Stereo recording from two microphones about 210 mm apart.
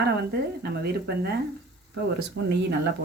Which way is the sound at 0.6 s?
50° right (ahead or behind).